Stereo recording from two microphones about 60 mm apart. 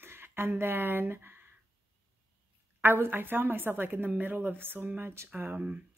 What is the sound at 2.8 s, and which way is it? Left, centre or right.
Speech, right.